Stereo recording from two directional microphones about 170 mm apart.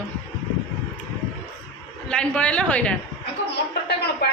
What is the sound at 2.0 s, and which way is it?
Speech, 5° left (ahead or behind).